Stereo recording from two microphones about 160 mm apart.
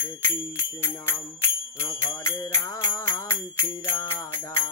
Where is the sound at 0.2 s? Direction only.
15° left (ahead or behind).